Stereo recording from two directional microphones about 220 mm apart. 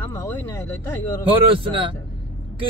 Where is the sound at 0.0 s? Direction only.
10° left (ahead or behind).